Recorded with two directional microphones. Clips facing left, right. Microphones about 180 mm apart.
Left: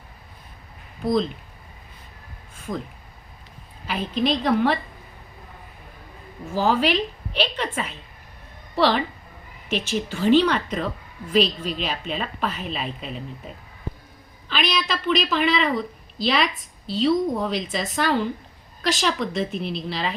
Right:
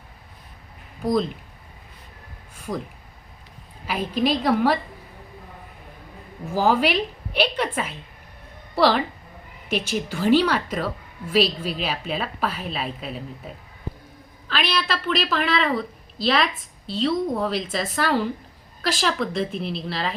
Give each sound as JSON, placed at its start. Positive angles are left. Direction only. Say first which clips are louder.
{"t": 2.7, "sound": "a woman's voice", "louder": "right 1 dB", "side_deg": -10}
{"t": 3.8, "sound": "a woman's voice", "louder": "right 1 dB", "side_deg": -10}
{"t": 6.5, "sound": "a woman's voice", "louder": "right 1 dB", "side_deg": -10}